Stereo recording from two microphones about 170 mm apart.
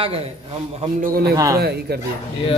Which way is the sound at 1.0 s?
60° right (ahead or behind).